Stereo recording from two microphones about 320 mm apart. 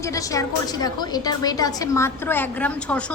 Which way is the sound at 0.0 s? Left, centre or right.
Centre.